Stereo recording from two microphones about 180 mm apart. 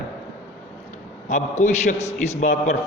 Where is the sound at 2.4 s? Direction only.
40° left (ahead or behind).